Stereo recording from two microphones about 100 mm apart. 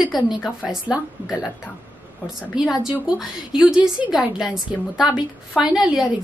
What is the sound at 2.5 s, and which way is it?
A woman's voice, 5° right (ahead or behind).